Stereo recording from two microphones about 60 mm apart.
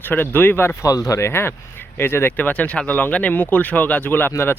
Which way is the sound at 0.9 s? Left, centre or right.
Left.